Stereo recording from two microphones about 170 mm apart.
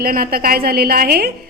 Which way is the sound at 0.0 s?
60° right (ahead or behind).